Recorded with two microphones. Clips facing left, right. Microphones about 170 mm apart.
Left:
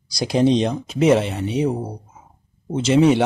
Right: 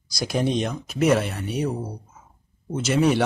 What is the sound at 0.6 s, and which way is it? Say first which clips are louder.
Speech: left 4 dB; 25° left (ahead or behind).